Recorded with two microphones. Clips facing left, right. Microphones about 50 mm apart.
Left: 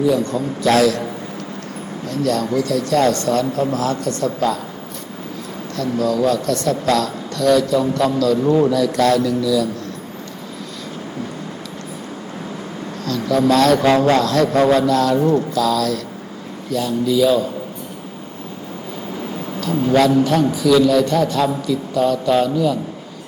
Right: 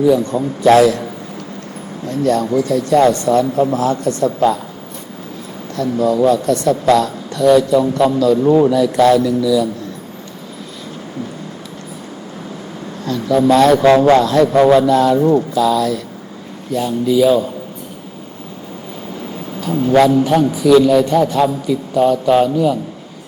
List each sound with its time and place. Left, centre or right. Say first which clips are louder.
0.1 s speech: right 4 dB; right
2.0 s speech: right 4 dB; right
5.7 s speech: right 4 dB; right
13.1 s a man's voice: right 3 dB; centre
19.9 s a man's voice: right 3 dB; centre